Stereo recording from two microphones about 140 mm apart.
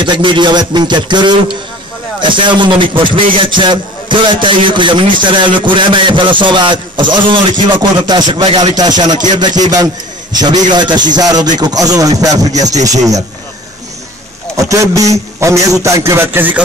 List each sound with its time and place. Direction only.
0.0 s a man's voice: 35° right (ahead or behind)
14.6 s a man's voice: 25° right (ahead or behind)